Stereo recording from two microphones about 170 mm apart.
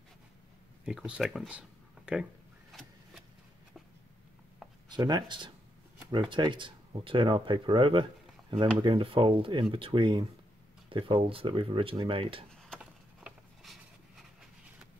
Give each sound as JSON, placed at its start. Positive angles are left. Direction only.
{"t": 0.8, "sound": "speech", "side_deg": -5}
{"t": 2.7, "sound": "vehicle", "side_deg": 0}
{"t": 4.8, "sound": "speech", "side_deg": -25}
{"t": 13.2, "sound": "a sound", "side_deg": 0}